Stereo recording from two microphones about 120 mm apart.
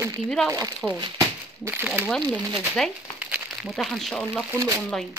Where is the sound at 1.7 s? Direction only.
15° right (ahead or behind).